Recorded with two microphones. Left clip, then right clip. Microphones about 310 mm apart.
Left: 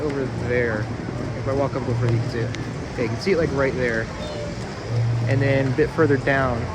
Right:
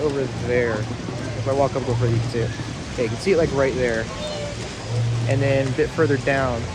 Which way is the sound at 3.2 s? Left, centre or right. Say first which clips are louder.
Right 2 dB; centre.